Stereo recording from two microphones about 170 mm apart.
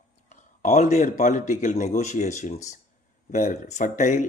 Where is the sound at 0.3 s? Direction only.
45° left (ahead or behind).